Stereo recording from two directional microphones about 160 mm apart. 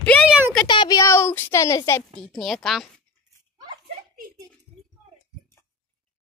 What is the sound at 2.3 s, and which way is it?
Speech, centre (ahead or behind).